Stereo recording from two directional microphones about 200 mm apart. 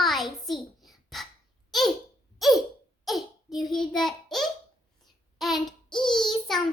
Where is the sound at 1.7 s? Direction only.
Centre (ahead or behind).